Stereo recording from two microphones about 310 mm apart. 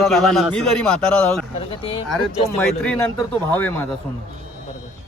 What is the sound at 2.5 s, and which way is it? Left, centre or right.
A man's voice, centre.